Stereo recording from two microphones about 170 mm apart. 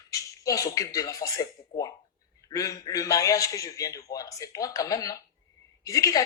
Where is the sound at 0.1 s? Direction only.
20° left (ahead or behind).